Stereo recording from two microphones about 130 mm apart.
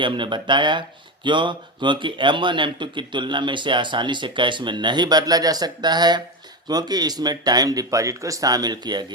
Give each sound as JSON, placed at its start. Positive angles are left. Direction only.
{"t": 0.0, "sound": "speech", "side_deg": -40}